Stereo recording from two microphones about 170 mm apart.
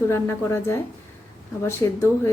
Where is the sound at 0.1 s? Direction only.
15° left (ahead or behind).